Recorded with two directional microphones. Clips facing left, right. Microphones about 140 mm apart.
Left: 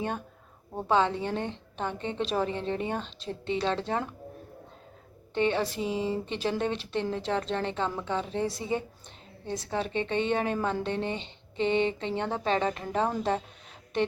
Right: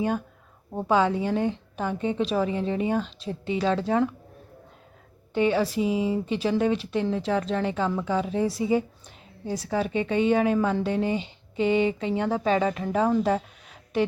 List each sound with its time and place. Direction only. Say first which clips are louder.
0.8 s a woman's voice: right 3 dB; 10° right (ahead or behind)
5.3 s a woman's voice: right 4 dB; 5° right (ahead or behind)